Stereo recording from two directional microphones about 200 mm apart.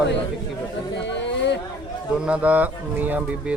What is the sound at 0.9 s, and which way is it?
Chatter, 60° left (ahead or behind).